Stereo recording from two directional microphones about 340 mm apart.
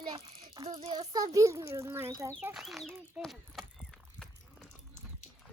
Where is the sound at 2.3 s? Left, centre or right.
Centre.